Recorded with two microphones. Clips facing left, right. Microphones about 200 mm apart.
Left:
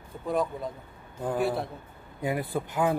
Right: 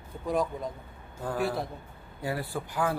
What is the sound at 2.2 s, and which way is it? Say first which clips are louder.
Speech: left 4 dB; 20° left (ahead or behind).